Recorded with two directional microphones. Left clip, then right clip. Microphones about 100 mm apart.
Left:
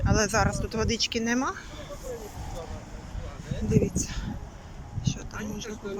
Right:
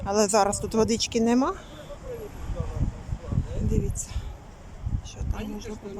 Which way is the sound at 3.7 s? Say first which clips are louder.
Left 7 dB; 15° right (ahead or behind).